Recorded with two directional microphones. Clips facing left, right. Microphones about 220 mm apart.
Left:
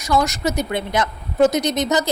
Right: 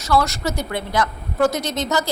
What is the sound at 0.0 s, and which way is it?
A woman's voice, 15° left (ahead or behind).